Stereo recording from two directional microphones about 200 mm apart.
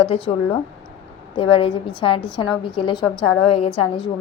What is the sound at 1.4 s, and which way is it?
A woman's voice, 30° left (ahead or behind).